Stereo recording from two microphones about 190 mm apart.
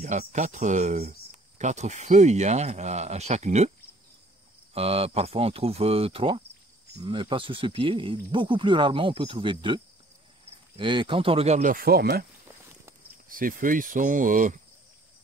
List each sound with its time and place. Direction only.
0.2 s speech: 40° right (ahead or behind)
4.7 s speech: 30° right (ahead or behind)
10.8 s speech: 25° right (ahead or behind); by 12.3 s 55° right (ahead or behind)
13.3 s speech: 45° right (ahead or behind)